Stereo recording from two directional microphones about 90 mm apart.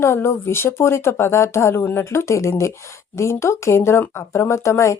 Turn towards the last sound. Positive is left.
turn(degrees=35)  # may be behind; listen again after turning